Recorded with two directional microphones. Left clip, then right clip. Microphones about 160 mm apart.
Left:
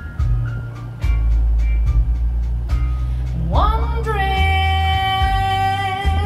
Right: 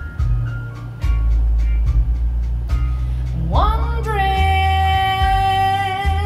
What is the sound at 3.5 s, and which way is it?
Music, 5° right (ahead or behind).